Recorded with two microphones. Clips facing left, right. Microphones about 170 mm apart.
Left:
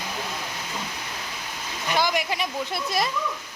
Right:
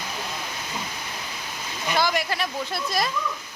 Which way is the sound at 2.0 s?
15° left (ahead or behind).